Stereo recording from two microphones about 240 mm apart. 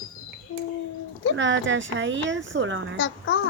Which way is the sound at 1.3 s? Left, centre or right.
Right.